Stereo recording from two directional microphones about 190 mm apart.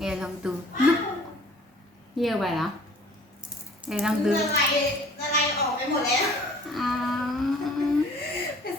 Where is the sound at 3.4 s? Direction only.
5° right (ahead or behind).